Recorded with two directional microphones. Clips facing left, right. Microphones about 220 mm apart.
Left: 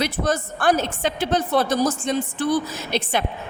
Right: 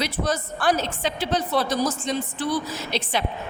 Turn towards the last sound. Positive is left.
turn(degrees=50)  # may be behind; listen again after turning